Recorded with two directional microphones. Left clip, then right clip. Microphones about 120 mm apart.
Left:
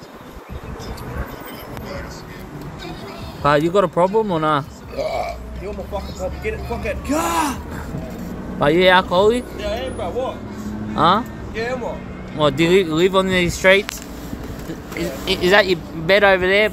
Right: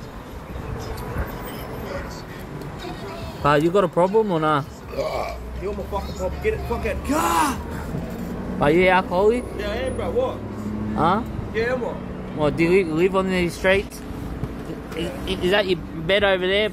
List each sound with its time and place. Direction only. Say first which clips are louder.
3.4 s speech: left 2 dB; 35° left (ahead or behind)
4.9 s burping: left 3 dB; 30° right (ahead or behind)
6.4 s speech: right 2 dB; 25° right (ahead or behind)
8.5 s speech: left 4 dB; 50° left (ahead or behind)
9.6 s speech: left 2 dB; 30° right (ahead or behind)
11.0 s speech: left 5 dB; 55° left (ahead or behind)
11.5 s speech: right 1 dB; 35° right (ahead or behind)
12.4 s speech: left 4 dB; 60° left (ahead or behind)
15.5 s speech: left 6 dB; 30° left (ahead or behind)